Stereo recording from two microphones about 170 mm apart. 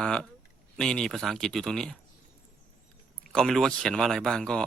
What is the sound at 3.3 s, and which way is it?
Speech, 5° left (ahead or behind).